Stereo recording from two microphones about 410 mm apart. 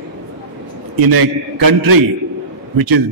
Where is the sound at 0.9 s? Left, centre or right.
Right.